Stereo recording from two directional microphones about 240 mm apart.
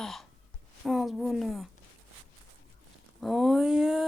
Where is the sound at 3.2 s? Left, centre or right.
Centre.